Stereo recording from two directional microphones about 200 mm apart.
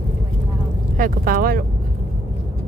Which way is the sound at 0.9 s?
45° right (ahead or behind).